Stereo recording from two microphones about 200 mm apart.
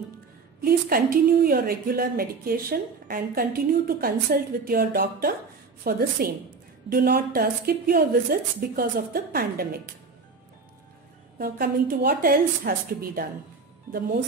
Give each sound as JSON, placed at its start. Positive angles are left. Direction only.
{"t": 0.6, "sound": "a woman's voice", "side_deg": -50}
{"t": 11.3, "sound": "a woman's voice", "side_deg": -50}